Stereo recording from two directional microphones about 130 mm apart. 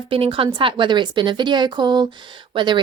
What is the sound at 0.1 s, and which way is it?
A woman's voice, 45° right (ahead or behind).